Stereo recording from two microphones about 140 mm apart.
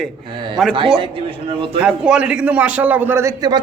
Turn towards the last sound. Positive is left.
turn(degrees=-15)  # may be behind; listen again after turning